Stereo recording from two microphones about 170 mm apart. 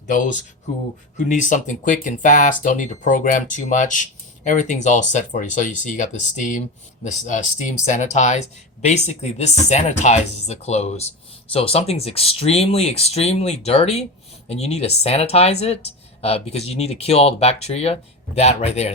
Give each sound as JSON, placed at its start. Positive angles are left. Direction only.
{"t": 0.1, "sound": "speech", "side_deg": 50}